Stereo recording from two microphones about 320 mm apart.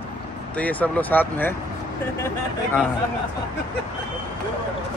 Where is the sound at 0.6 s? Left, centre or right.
Centre.